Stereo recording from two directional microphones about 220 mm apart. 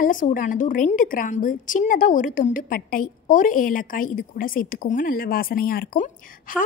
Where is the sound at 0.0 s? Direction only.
35° left (ahead or behind).